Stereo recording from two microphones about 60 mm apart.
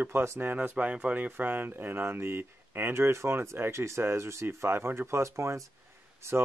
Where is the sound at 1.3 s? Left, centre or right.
Right.